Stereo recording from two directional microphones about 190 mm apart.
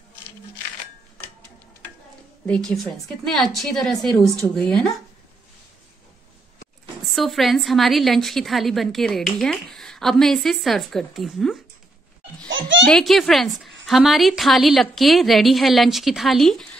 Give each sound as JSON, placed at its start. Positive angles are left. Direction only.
{"t": 2.4, "sound": "a woman's voice", "side_deg": 5}
{"t": 7.1, "sound": "a woman's voice", "side_deg": 0}
{"t": 12.4, "sound": "a sound", "side_deg": -80}
{"t": 12.8, "sound": "a woman's voice", "side_deg": 0}